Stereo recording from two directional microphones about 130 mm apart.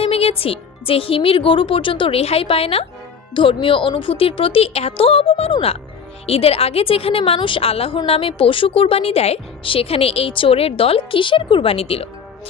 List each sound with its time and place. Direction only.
0.0 s a woman's voice: 50° left (ahead or behind)